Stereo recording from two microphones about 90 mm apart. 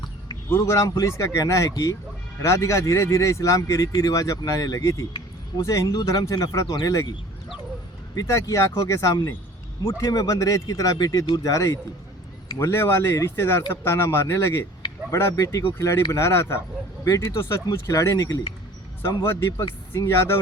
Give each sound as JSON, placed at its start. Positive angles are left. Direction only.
{"t": 0.5, "sound": "speech", "side_deg": 30}
{"t": 8.1, "sound": "speech", "side_deg": 35}